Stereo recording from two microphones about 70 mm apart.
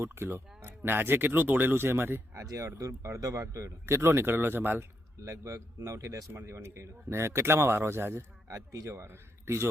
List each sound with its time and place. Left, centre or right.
0.0 s a man's voice: right
2.3 s speech: right
5.2 s a man's voice: right
8.5 s speech: right